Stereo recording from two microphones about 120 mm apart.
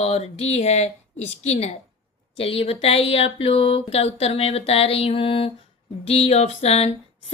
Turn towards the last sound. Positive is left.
turn(degrees=60)  # may be behind; listen again after turning